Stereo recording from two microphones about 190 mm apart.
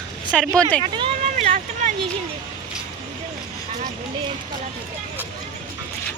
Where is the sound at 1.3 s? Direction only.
40° right (ahead or behind).